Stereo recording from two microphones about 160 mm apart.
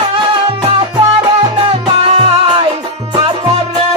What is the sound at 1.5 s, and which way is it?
Music, 35° right (ahead or behind).